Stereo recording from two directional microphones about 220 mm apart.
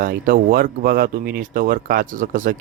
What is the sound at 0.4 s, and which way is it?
Speech, 40° right (ahead or behind).